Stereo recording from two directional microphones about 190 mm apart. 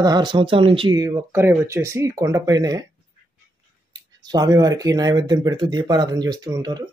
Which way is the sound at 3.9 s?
20° right (ahead or behind).